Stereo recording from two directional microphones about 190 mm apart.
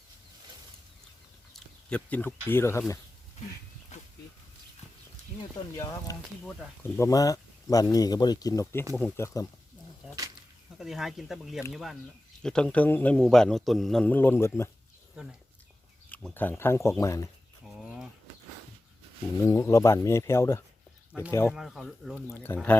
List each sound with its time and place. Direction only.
1.5 s speech: 5° left (ahead or behind)
5.4 s speech: 15° left (ahead or behind)
6.4 s a man's voice: 5° left (ahead or behind)
7.0 s speech: 20° left (ahead or behind)
10.8 s a man's voice: centre (ahead or behind); by 14.7 s 15° left (ahead or behind)
15.1 s speech: 5° right (ahead or behind)
16.0 s speech: 10° left (ahead or behind)
17.7 s a sound: 5° right (ahead or behind)
19.5 s speech: 15° left (ahead or behind)
21.5 s a man's voice: centre (ahead or behind)